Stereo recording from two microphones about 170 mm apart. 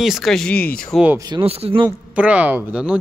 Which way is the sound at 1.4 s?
35° right (ahead or behind).